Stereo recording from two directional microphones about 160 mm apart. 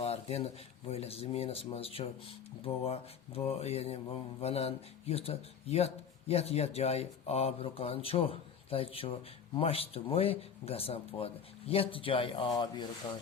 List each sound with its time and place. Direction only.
0.0 s mantra: 40° left (ahead or behind)